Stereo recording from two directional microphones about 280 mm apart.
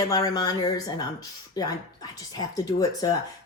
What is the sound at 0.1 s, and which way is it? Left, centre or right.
Speech, centre.